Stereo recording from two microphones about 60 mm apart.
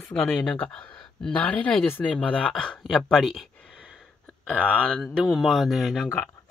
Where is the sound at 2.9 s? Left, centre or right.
Centre.